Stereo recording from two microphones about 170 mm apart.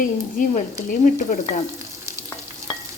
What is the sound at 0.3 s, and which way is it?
Speech, 50° left (ahead or behind).